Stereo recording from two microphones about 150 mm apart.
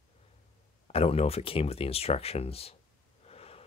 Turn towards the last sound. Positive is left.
turn(degrees=40)  # may be behind; listen again after turning